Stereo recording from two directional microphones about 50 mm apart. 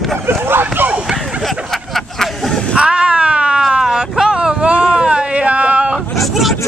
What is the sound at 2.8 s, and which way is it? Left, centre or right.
Cat, centre.